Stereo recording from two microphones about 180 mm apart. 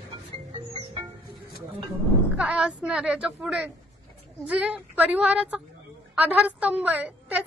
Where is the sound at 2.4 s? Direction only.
5° right (ahead or behind).